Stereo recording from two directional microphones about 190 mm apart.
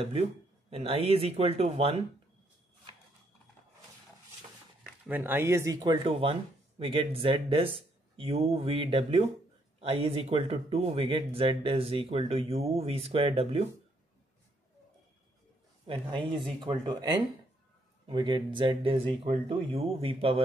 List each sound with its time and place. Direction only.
0.0 s speech: 30° right (ahead or behind)
4.8 s speech: 10° right (ahead or behind); by 13.7 s 30° right (ahead or behind)
15.9 s speech: 25° right (ahead or behind)